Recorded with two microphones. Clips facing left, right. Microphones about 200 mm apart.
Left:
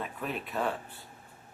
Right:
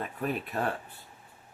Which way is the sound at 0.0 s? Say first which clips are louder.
Right 3 dB; 45° right (ahead or behind).